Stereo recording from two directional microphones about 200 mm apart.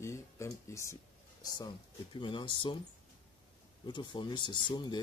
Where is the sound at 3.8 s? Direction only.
20° left (ahead or behind).